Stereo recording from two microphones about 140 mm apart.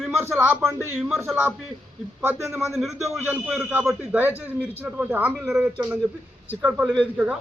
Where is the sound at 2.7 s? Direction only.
Centre (ahead or behind).